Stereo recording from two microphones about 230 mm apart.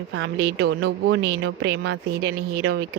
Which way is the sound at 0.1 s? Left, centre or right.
Right.